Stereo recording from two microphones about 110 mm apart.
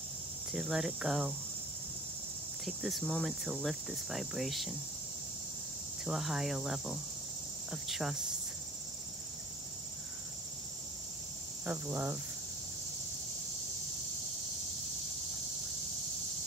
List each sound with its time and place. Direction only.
0.5 s speech: 5° right (ahead or behind)
2.6 s speech: centre (ahead or behind)
6.0 s speech: 5° right (ahead or behind)
11.6 s speech: 10° right (ahead or behind)